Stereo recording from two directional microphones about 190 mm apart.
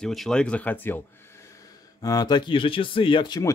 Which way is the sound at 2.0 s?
20° left (ahead or behind).